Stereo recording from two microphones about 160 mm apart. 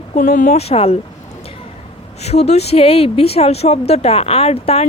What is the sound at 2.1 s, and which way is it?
A woman's voice, 40° left (ahead or behind).